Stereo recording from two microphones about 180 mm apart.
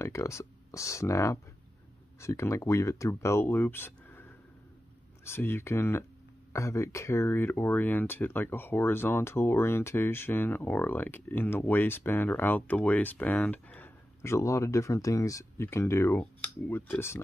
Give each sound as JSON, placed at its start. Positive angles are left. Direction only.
{"t": 0.0, "sound": "speech", "side_deg": 15}